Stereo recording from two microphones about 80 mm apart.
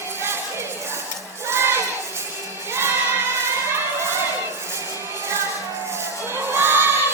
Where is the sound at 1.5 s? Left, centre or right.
Right.